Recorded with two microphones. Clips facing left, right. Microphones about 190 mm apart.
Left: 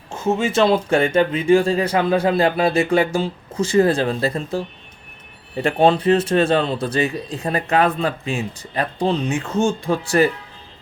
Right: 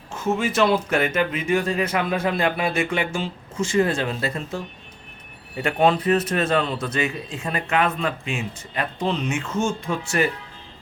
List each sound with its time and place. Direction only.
0.1 s a man's voice: 30° left (ahead or behind)